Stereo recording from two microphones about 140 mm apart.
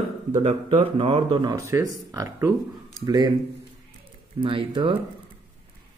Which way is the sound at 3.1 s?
30° right (ahead or behind).